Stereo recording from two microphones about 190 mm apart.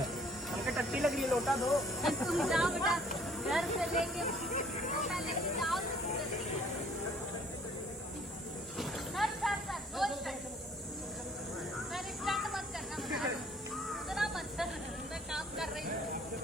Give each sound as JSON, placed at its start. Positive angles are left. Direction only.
{"t": 0.8, "sound": "speech", "side_deg": 0}
{"t": 4.3, "sound": "a sound", "side_deg": 40}
{"t": 5.0, "sound": "music", "side_deg": 0}
{"t": 8.8, "sound": "snake", "side_deg": 0}
{"t": 11.9, "sound": "a sound", "side_deg": 0}
{"t": 15.3, "sound": "vehicle", "side_deg": 0}